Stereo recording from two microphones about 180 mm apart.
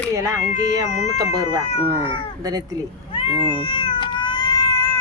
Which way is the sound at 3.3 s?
25° right (ahead or behind).